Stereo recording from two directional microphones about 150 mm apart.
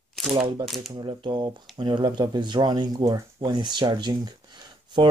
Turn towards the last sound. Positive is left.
turn(degrees=-30)  # may be behind; listen again after turning